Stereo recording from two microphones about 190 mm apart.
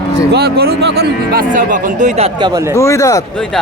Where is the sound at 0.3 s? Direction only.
55° right (ahead or behind); by 2.5 s 30° right (ahead or behind).